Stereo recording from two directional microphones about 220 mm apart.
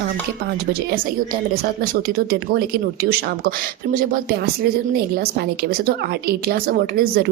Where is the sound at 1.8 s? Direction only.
40° right (ahead or behind).